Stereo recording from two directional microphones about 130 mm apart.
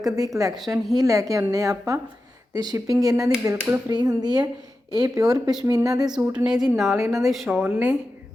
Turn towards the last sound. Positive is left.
turn(degrees=-15)  # may be behind; listen again after turning